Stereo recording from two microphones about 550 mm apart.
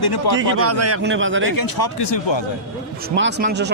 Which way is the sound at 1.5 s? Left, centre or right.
Left.